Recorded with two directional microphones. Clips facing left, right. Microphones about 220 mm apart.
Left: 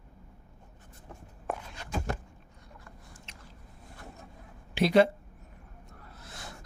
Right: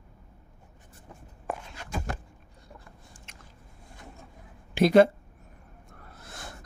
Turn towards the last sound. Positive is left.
turn(degrees=-50)  # may be behind; listen again after turning